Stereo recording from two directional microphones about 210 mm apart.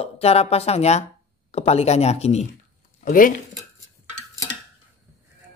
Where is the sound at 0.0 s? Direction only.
30° left (ahead or behind).